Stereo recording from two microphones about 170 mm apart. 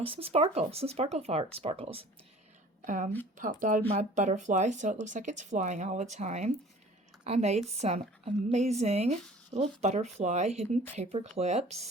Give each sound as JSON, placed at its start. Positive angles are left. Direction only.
{"t": 0.0, "sound": "speech", "side_deg": -35}
{"t": 2.8, "sound": "a woman's voice", "side_deg": -50}